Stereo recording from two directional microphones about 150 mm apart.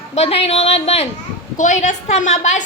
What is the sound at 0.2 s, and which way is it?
Speech, 40° left (ahead or behind).